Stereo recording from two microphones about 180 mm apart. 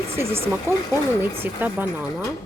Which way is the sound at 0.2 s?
15° right (ahead or behind).